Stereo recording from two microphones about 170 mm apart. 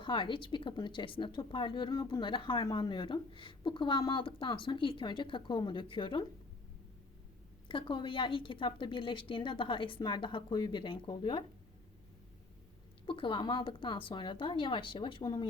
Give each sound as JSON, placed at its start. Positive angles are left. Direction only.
{"t": 0.0, "sound": "speech", "side_deg": 30}
{"t": 7.7, "sound": "speech", "side_deg": 30}
{"t": 13.1, "sound": "speech", "side_deg": 30}